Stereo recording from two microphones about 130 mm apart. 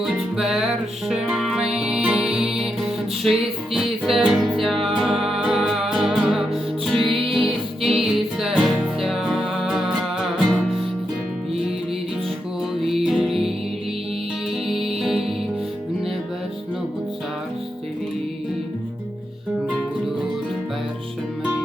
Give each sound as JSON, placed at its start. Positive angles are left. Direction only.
{"t": 0.0, "sound": "music", "side_deg": 0}
{"t": 7.1, "sound": "music", "side_deg": -40}
{"t": 7.8, "sound": "music", "side_deg": 0}
{"t": 12.8, "sound": "music", "side_deg": 0}